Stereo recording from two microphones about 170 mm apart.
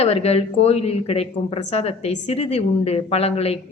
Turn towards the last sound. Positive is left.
turn(degrees=35)  # may be behind; listen again after turning